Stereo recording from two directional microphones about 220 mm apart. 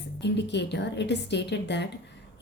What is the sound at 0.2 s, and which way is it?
Speech, 50° left (ahead or behind).